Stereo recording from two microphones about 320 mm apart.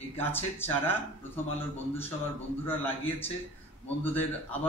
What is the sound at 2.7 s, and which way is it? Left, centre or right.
A man's voice, centre.